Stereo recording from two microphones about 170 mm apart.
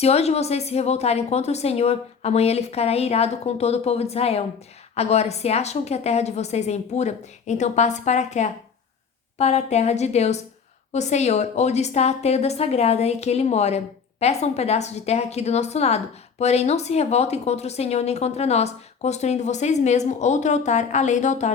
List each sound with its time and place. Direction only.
0.0 s speech: 40° left (ahead or behind)